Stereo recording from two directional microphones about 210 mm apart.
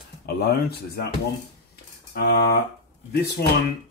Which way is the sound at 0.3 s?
50° left (ahead or behind).